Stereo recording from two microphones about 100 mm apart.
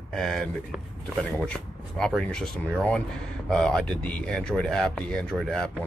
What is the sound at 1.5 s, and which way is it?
Speech, 5° left (ahead or behind).